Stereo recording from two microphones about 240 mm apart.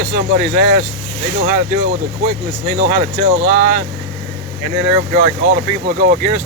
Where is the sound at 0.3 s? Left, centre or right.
Right.